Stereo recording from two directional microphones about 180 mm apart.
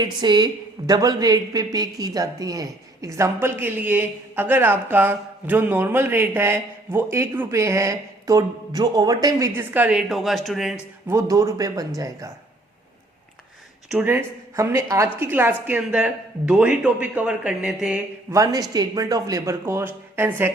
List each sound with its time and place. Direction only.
0.0 s a woman's voice: 25° right (ahead or behind)
9.6 s a woman's voice: 10° right (ahead or behind)
11.1 s a woman's voice: 15° right (ahead or behind)
13.9 s a woman's voice: 10° right (ahead or behind)
18.7 s a woman's voice: 20° right (ahead or behind)